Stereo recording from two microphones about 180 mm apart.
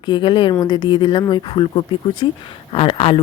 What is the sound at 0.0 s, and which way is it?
Speech, 25° left (ahead or behind).